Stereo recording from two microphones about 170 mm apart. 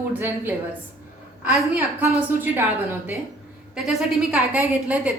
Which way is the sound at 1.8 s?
10° right (ahead or behind).